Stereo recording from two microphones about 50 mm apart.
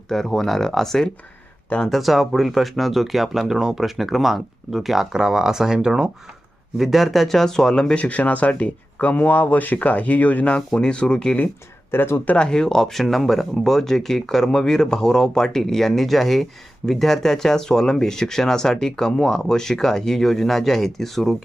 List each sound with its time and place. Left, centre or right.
0.1 s speech: centre
3.4 s speech: centre
6.7 s speech: centre
7.9 s speech: left
10.8 s speech: centre
11.9 s speech: left
12.4 s speech: centre